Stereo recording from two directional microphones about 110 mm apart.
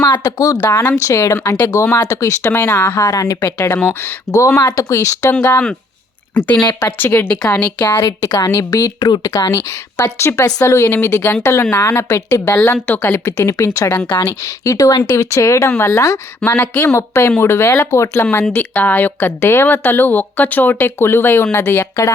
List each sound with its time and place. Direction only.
0.0 s a woman's voice: 40° left (ahead or behind)
0.6 s speech: 15° left (ahead or behind)
0.9 s a woman's voice: 30° left (ahead or behind)
5.3 s speech: 15° left (ahead or behind)
8.2 s a woman's voice: 35° left (ahead or behind)
16.4 s a woman's voice: 15° left (ahead or behind)